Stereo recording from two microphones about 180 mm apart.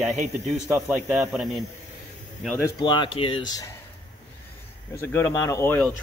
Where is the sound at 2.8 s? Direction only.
25° left (ahead or behind).